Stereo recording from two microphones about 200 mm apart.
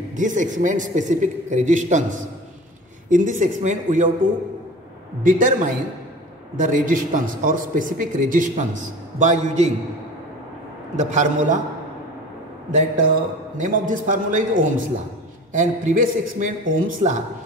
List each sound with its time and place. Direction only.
0.1 s a man's voice: 40° right (ahead or behind)
11.0 s a man's voice: 40° right (ahead or behind)
13.6 s a man's voice: 40° right (ahead or behind)